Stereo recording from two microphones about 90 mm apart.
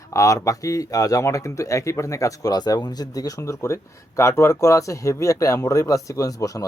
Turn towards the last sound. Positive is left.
turn(degrees=40)  # may be behind; listen again after turning